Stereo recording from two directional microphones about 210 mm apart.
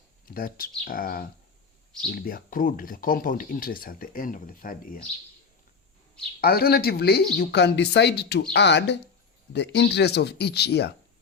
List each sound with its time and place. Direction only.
0.3 s speech: 45° left (ahead or behind)
6.4 s speech: 45° left (ahead or behind)